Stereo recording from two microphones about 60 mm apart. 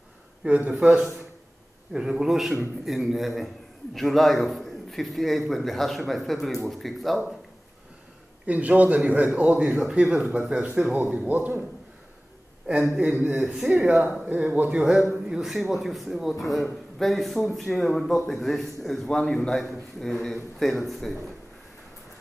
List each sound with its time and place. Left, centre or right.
0.5 s a man's voice: right; by 7.2 s centre
8.5 s a man's voice: right
12.7 s a man's voice: centre
13.7 s speech: centre
14.4 s a man's voice: right
14.7 s a man's voice: centre